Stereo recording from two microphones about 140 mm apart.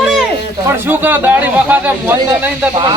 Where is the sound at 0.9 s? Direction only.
15° right (ahead or behind).